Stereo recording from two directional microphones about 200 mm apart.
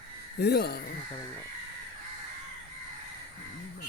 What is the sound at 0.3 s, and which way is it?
Speech, 55° left (ahead or behind).